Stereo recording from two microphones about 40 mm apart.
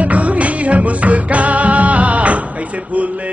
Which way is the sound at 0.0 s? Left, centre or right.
Right.